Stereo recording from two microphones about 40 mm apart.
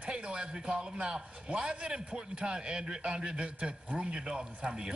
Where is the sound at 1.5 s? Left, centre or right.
Right.